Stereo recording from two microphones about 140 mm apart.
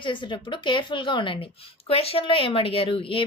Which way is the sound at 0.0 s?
35° left (ahead or behind).